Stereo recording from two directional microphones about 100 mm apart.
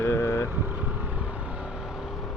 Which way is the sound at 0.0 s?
25° left (ahead or behind).